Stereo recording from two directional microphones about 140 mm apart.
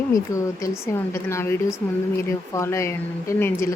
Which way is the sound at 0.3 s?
25° left (ahead or behind).